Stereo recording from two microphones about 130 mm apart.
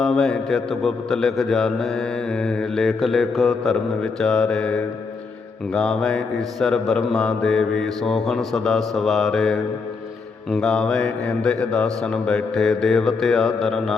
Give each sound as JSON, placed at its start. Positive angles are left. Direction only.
{"t": 0.0, "sound": "mantra", "side_deg": 5}